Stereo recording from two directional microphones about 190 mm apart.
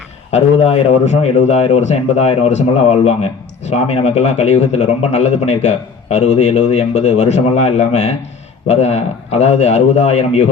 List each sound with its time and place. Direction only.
0.3 s a man's voice: 35° left (ahead or behind)